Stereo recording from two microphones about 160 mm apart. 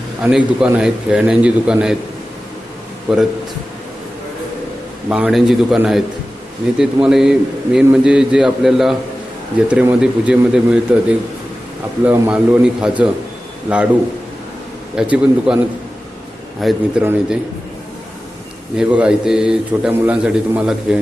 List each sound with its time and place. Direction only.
0.2 s a man's voice: 5° right (ahead or behind)
3.1 s a man's voice: 5° right (ahead or behind)
5.0 s a man's voice: 5° right (ahead or behind)
12.0 s a man's voice: 15° right (ahead or behind)
12.3 s a man's voice: 5° right (ahead or behind)
14.9 s a man's voice: 5° right (ahead or behind)
16.6 s a man's voice: centre (ahead or behind)
17.0 s a man's voice: 10° right (ahead or behind)
18.8 s a man's voice: 5° right (ahead or behind)